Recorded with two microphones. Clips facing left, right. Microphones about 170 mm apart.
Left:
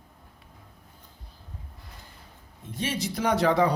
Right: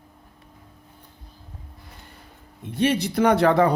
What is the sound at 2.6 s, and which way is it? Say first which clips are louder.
Speech: right 9 dB; 65° right (ahead or behind).